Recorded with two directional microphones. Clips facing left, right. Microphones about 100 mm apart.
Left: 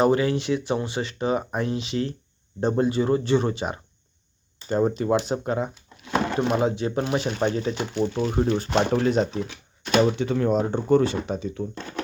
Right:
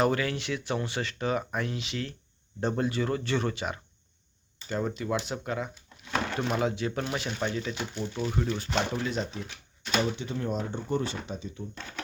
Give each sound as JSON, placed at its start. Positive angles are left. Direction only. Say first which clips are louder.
{"t": 0.0, "sound": "speech", "louder": "left 6 dB", "side_deg": 25}
{"t": 7.2, "sound": "speech", "louder": "left 7 dB", "side_deg": 40}
{"t": 7.8, "sound": "speech", "louder": "left 8 dB", "side_deg": 80}
{"t": 8.0, "sound": "speech", "louder": "left 7 dB", "side_deg": 35}